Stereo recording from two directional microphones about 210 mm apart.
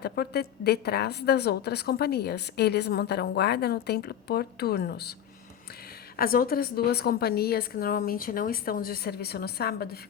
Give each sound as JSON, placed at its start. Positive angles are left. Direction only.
{"t": 0.0, "sound": "a woman's voice", "side_deg": 50}
{"t": 6.1, "sound": "a woman's voice", "side_deg": 45}